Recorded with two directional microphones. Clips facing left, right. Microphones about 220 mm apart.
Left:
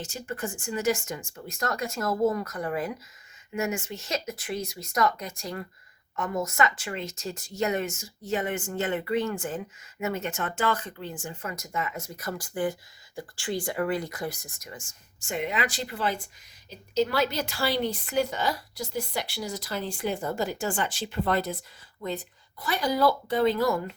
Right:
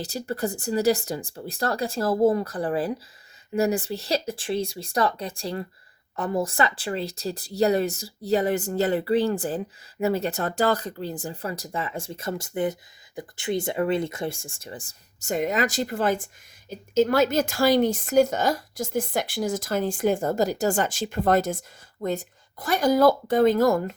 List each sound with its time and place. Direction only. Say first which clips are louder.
0.0 s speech: right 6 dB; 35° right (ahead or behind)